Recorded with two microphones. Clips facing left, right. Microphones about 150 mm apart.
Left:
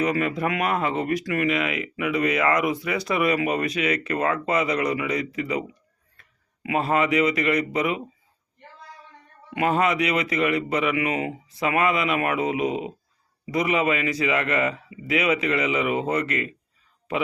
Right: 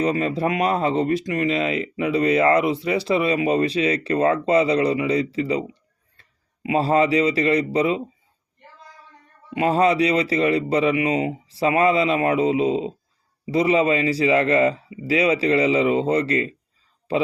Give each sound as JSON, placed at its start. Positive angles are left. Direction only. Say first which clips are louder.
{"t": 0.0, "sound": "a man's voice", "louder": "right 2 dB", "side_deg": -30}
{"t": 9.5, "sound": "a man's voice", "louder": "right 4 dB", "side_deg": -30}